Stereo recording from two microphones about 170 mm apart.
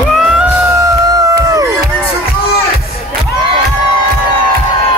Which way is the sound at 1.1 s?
20° right (ahead or behind).